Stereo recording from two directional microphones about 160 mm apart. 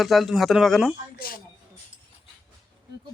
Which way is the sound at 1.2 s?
65° left (ahead or behind).